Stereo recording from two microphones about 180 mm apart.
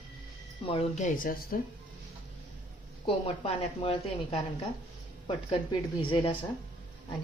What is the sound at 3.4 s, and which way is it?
Speech, 30° left (ahead or behind).